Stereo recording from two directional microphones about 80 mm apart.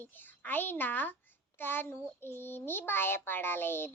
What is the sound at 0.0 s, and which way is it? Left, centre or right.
A child's voice, left.